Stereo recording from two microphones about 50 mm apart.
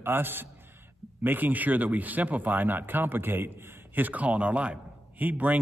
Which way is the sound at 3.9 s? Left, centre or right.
Right.